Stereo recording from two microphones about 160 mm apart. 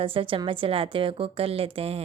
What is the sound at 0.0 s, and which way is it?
Speech, 35° right (ahead or behind).